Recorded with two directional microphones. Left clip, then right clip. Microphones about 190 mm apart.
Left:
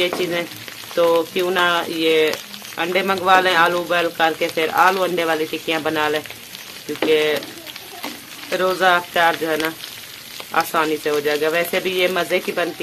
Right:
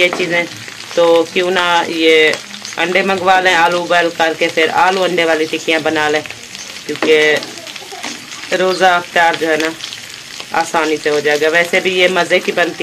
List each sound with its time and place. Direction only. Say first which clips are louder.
0.0 s speech: right 7 dB; 15° left (ahead or behind)
8.5 s speech: right 5 dB; 5° left (ahead or behind)